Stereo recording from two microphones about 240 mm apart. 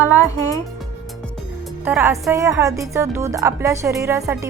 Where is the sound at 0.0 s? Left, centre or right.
Centre.